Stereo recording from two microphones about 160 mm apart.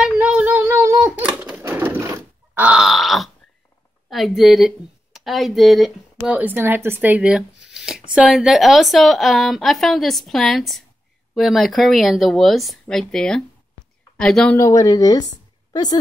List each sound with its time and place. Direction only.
0.0 s child singing: 5° right (ahead or behind)
1.3 s typewriter: 5° right (ahead or behind)
1.6 s a sound: 10° right (ahead or behind)
4.1 s speech: centre (ahead or behind)
7.7 s a sound: 5° right (ahead or behind)
8.1 s a woman's voice: 5° right (ahead or behind)
14.6 s speech: 20° left (ahead or behind)